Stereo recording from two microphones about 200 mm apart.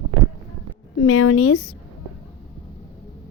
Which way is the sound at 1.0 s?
90° left.